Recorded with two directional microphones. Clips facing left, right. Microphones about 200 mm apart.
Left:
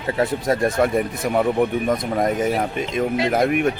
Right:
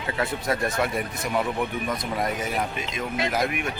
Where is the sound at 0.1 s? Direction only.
40° left (ahead or behind).